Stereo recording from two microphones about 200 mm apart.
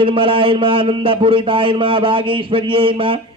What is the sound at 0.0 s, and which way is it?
A man's voice, 25° right (ahead or behind).